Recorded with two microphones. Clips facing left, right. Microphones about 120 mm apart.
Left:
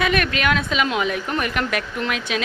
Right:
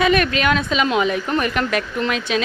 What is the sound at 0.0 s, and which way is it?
A woman's voice, centre (ahead or behind).